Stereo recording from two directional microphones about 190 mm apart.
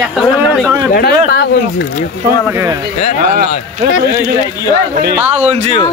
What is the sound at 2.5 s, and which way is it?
Speech, 20° right (ahead or behind).